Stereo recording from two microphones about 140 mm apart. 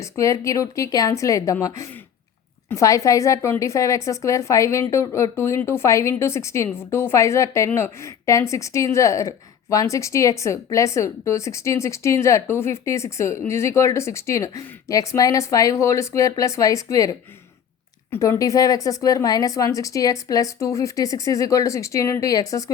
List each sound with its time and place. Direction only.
0.0 s a woman's voice: 20° left (ahead or behind)